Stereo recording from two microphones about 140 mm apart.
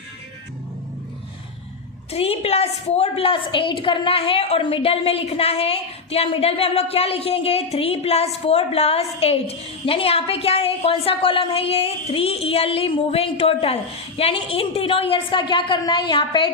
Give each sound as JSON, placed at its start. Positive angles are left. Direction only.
{"t": 2.0, "sound": "a woman's voice", "side_deg": 45}